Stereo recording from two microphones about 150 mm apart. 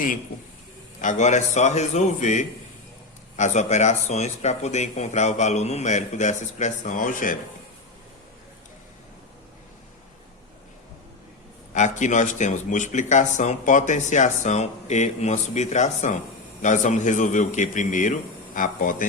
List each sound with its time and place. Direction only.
1.0 s speech: 55° left (ahead or behind)
11.7 s a man's voice: 55° left (ahead or behind)